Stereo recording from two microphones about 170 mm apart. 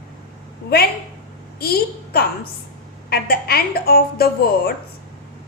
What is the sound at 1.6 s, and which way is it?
A woman's voice, 65° left (ahead or behind).